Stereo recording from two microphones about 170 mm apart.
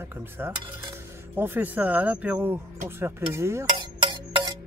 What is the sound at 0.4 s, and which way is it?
Speech, 10° right (ahead or behind).